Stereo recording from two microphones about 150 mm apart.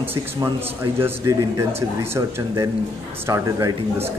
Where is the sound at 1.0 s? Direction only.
20° right (ahead or behind).